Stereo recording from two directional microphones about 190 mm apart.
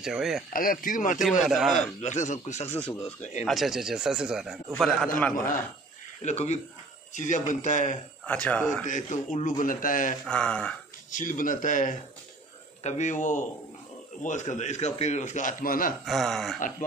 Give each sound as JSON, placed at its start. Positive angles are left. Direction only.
{"t": 0.0, "sound": "speech", "side_deg": -5}
{"t": 0.5, "sound": "speech", "side_deg": 50}
{"t": 1.4, "sound": "speech", "side_deg": 0}
{"t": 1.8, "sound": "a man's voice", "side_deg": 40}
{"t": 3.4, "sound": "speech", "side_deg": 0}
{"t": 6.2, "sound": "a man's voice", "side_deg": 35}
{"t": 8.3, "sound": "speech", "side_deg": 5}
{"t": 8.8, "sound": "a man's voice", "side_deg": 40}
{"t": 10.2, "sound": "speech", "side_deg": 5}
{"t": 11.1, "sound": "a man's voice", "side_deg": 45}
{"t": 16.1, "sound": "speech", "side_deg": 0}